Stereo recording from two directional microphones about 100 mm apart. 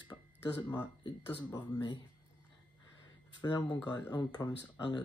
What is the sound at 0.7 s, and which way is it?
Speech, 45° left (ahead or behind).